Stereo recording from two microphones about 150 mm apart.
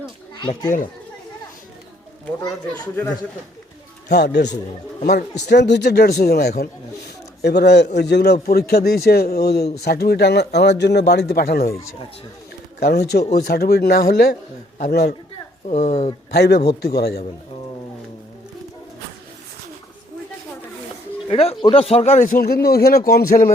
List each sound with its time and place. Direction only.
0.3 s speech: 30° left (ahead or behind)
2.4 s speech: 25° left (ahead or behind)
4.1 s speech: 90° left
5.8 s speech: 90° left
12.8 s a man's voice: 90° left
15.6 s speech: 50° left (ahead or behind)
16.3 s speech: 90° left
21.2 s speech: 40° left (ahead or behind); by 23.3 s 90° left
23.3 s speech: 50° left (ahead or behind)